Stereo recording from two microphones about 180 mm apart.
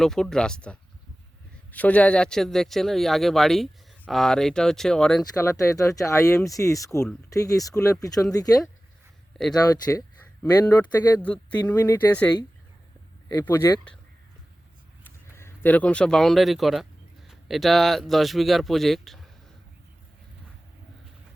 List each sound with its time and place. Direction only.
0.0 s speech: centre (ahead or behind)
5.4 s speech: 15° left (ahead or behind)
13.4 s speech: 15° left (ahead or behind)
13.7 s speech: centre (ahead or behind)
15.0 s speech: 10° left (ahead or behind)